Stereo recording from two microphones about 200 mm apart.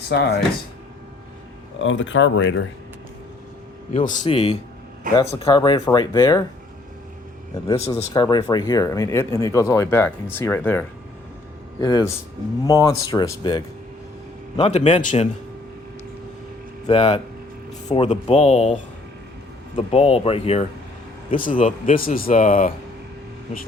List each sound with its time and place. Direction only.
0.1 s speech: 60° left (ahead or behind)
1.8 s speech: 70° left (ahead or behind)
4.2 s speech: 25° left (ahead or behind)
7.7 s speech: 20° left (ahead or behind)
16.9 s speech: 30° left (ahead or behind)
21.2 s speech: 45° left (ahead or behind)